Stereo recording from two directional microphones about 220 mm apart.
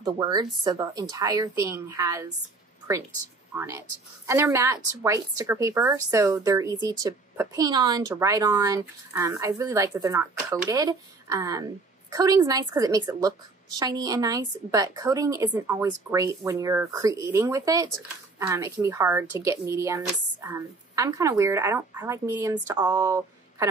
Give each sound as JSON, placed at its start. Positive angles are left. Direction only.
{"t": 0.0, "sound": "a woman's voice", "side_deg": -20}
{"t": 3.5, "sound": "a woman's voice", "side_deg": -10}